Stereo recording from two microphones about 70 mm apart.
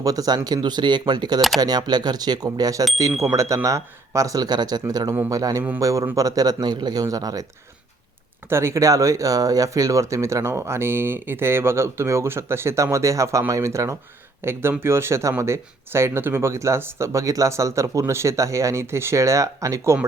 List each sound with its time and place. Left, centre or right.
0.0 s speech: right
0.4 s speech: right
1.4 s speech: centre
1.6 s speech: right
3.2 s speech: right
4.4 s speech: right
8.4 s speech: right
14.4 s speech: right